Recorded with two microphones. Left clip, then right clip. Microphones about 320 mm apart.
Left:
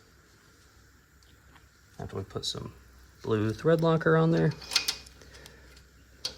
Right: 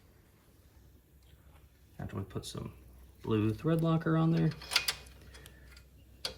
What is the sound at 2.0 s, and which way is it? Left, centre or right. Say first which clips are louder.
Speech: left 9 dB; centre.